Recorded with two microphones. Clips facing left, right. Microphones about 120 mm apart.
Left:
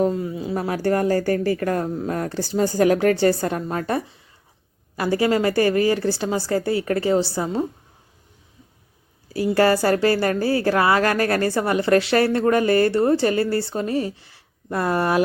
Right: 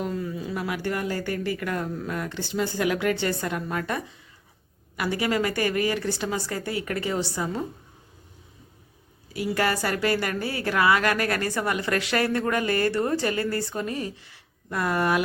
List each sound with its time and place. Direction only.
0.0 s a woman's voice: 25° left (ahead or behind)
9.3 s a woman's voice: 35° left (ahead or behind)